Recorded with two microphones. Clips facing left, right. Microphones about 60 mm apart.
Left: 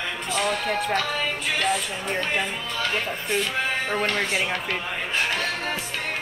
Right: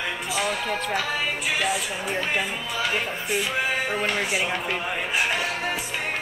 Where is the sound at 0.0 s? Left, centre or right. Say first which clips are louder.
Left 1 dB; centre.